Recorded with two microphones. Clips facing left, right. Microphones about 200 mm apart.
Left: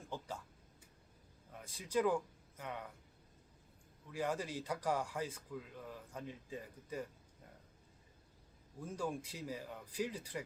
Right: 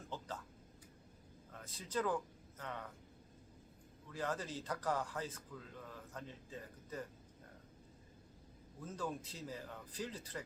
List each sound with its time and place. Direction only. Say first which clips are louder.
0.1 s a sound: left 2 dB; 10° left (ahead or behind)
1.5 s speech: left 4 dB; 10° left (ahead or behind)
4.1 s speech: left 2 dB; 10° left (ahead or behind)
8.8 s speech: left 2 dB; 10° left (ahead or behind)